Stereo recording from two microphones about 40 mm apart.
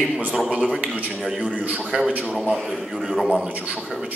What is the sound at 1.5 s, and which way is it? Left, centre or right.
Speech, right.